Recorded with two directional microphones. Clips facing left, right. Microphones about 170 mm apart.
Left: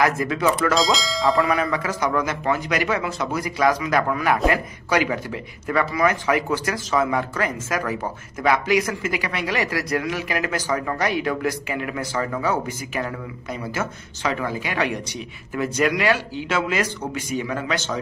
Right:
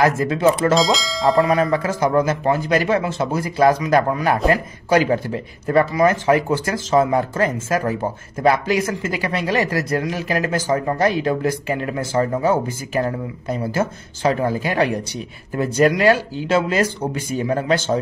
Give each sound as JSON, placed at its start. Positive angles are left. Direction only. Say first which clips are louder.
{"t": 0.0, "sound": "speech", "louder": "right 4 dB", "side_deg": -30}
{"t": 0.7, "sound": "speech", "louder": "right 3 dB", "side_deg": 0}
{"t": 1.5, "sound": "speech", "louder": "right 5 dB", "side_deg": -35}